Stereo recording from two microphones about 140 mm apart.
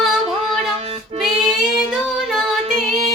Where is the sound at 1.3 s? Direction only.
30° right (ahead or behind).